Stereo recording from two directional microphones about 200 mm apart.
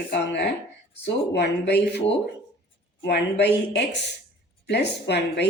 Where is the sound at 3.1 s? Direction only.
60° left (ahead or behind).